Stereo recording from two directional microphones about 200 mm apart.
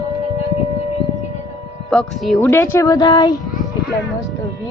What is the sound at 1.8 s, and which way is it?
Speech, centre (ahead or behind).